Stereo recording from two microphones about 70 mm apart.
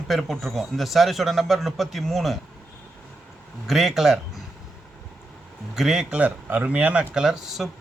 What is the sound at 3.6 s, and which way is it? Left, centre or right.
Speech, centre.